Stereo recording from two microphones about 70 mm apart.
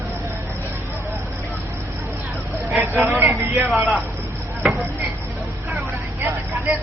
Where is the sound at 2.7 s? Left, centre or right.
Right.